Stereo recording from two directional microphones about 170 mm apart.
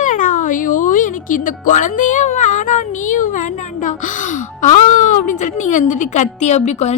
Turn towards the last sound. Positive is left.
turn(degrees=40)  # may be behind; listen again after turning